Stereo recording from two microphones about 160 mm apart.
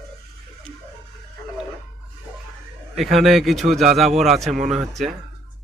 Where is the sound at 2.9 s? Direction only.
Centre (ahead or behind).